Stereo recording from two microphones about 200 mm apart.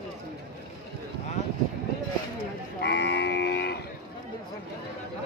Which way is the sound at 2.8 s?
60° left (ahead or behind).